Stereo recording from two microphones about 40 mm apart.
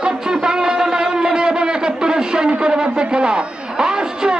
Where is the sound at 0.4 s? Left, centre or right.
Right.